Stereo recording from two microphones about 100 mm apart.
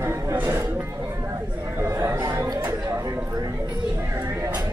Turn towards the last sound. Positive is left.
turn(degrees=-30)  # may be behind; listen again after turning